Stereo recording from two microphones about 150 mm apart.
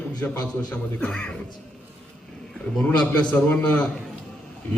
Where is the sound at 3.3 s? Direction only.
10° left (ahead or behind).